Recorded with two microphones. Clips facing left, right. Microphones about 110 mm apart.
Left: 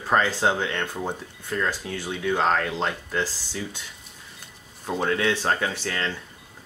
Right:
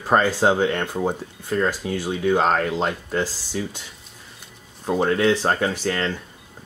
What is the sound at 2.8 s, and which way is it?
Speech, 40° right (ahead or behind).